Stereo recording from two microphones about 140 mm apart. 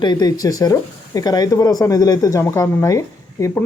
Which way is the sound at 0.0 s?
30° left (ahead or behind).